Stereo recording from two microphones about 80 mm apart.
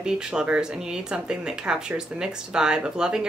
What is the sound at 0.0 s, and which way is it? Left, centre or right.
Speech, centre.